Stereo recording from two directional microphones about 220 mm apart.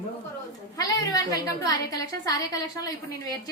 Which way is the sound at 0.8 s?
15° left (ahead or behind).